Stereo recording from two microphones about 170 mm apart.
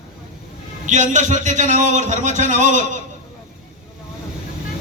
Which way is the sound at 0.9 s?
45° right (ahead or behind).